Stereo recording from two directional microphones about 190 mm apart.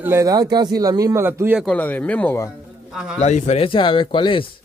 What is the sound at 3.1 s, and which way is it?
Speech, 35° left (ahead or behind).